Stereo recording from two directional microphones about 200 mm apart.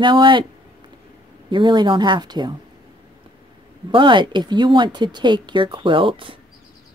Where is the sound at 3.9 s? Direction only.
25° right (ahead or behind).